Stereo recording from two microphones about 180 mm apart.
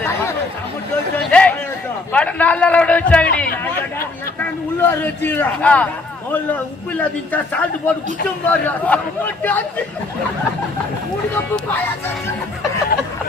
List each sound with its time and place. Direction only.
1.1 s a sound: 5° left (ahead or behind)
2.1 s a man's voice: 5° left (ahead or behind)
4.9 s a man's voice: 10° left (ahead or behind)